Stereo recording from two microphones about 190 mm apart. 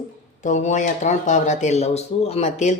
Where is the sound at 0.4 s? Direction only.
40° left (ahead or behind).